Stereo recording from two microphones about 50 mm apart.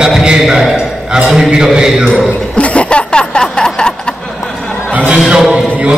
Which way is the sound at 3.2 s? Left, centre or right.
Centre.